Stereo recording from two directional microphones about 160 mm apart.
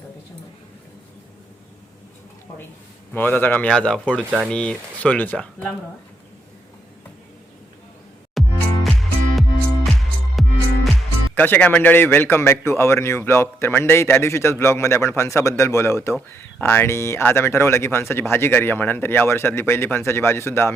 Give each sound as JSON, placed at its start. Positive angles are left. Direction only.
{"t": 3.1, "sound": "a man's voice", "side_deg": 10}
{"t": 8.4, "sound": "music", "side_deg": 0}
{"t": 11.3, "sound": "a man's voice", "side_deg": 10}